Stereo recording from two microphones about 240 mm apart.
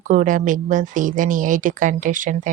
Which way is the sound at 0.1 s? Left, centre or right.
Right.